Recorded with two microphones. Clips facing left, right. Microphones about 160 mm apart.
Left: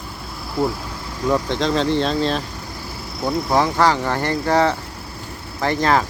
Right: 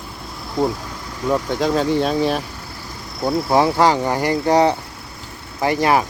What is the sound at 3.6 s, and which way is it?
Speech, 15° right (ahead or behind).